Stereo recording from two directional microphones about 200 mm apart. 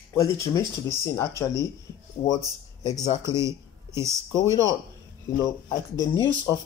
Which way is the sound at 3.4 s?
15° right (ahead or behind).